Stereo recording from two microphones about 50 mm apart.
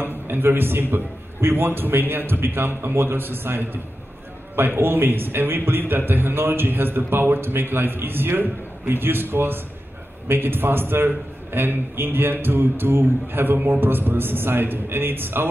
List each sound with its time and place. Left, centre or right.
0.0 s a man's voice: right